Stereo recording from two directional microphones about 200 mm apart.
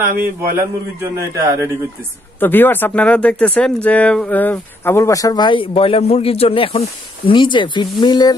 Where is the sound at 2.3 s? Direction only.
10° left (ahead or behind).